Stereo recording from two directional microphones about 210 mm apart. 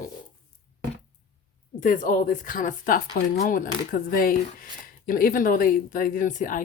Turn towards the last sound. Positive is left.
turn(degrees=40)  # may be behind; listen again after turning